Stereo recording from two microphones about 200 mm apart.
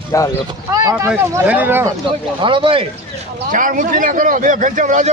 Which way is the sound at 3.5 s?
40° right (ahead or behind).